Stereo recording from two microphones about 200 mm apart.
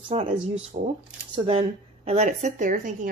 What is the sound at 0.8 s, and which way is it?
A woman's voice, 40° right (ahead or behind).